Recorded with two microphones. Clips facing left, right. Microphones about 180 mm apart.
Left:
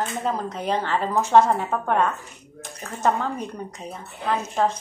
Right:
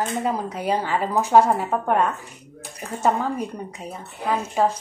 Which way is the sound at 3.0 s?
10° right (ahead or behind).